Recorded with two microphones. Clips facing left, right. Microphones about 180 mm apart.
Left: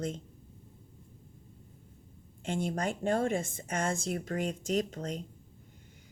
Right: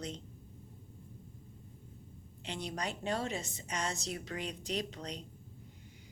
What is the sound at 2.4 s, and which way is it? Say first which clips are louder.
Speech: left 7 dB; 45° left (ahead or behind).